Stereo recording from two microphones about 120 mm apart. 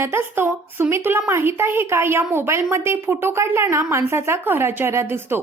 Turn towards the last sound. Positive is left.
turn(degrees=-20)  # may be behind; listen again after turning